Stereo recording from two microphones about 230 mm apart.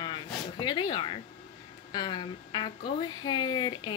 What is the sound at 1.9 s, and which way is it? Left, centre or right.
Speech, centre.